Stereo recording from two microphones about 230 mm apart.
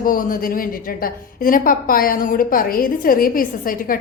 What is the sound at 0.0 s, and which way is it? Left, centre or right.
A woman's voice, left.